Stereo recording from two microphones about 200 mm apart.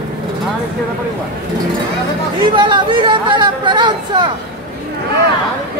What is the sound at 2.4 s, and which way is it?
Speech, 25° right (ahead or behind).